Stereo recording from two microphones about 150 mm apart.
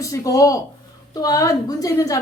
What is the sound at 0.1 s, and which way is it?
A woman's voice, 20° left (ahead or behind).